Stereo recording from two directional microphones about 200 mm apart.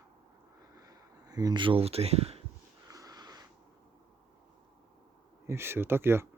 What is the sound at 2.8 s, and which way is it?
Sniff, 15° right (ahead or behind).